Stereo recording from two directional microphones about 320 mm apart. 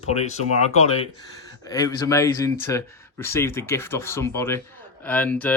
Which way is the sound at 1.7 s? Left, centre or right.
Centre.